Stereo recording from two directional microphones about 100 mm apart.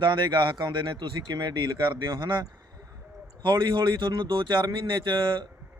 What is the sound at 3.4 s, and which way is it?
A man's voice, 55° right (ahead or behind).